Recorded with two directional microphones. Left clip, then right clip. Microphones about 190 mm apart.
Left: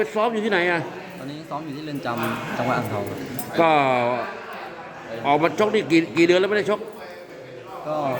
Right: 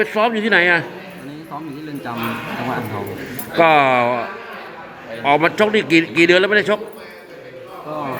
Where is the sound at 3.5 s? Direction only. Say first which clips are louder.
Right 5 dB; centre (ahead or behind).